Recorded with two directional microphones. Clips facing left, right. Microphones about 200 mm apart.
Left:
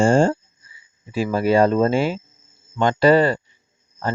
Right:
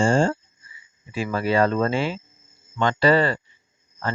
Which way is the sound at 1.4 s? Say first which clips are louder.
Left 4 dB; 45° left (ahead or behind).